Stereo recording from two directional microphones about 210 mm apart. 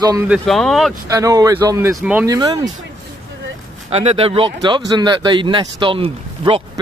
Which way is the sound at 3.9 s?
30° right (ahead or behind).